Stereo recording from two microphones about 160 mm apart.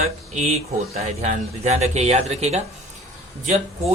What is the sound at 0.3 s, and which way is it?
Speech, 45° right (ahead or behind).